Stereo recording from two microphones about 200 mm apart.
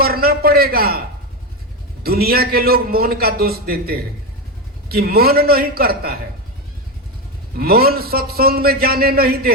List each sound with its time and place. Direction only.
0.0 s a man's voice: 50° right (ahead or behind)
2.0 s a man's voice: 50° right (ahead or behind)
7.6 s a man's voice: 50° right (ahead or behind)